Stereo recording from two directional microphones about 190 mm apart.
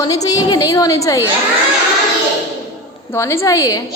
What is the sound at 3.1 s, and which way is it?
Speech, 15° left (ahead or behind).